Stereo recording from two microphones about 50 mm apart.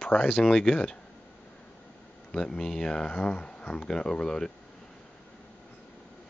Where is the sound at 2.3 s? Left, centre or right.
Centre.